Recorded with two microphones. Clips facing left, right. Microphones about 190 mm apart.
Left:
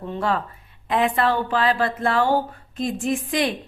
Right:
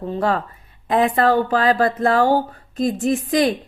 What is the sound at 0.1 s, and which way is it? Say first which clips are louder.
A woman's voice: right 3 dB; 40° right (ahead or behind).